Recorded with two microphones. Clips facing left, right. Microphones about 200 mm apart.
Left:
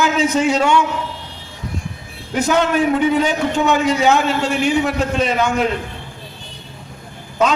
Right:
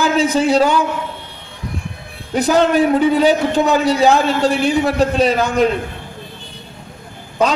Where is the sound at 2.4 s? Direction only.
35° right (ahead or behind).